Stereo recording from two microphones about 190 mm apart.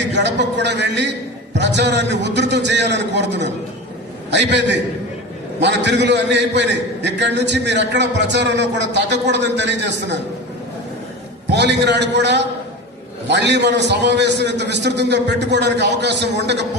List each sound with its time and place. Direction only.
0.0 s a man's voice: 65° right (ahead or behind)
11.4 s a man's voice: 65° right (ahead or behind)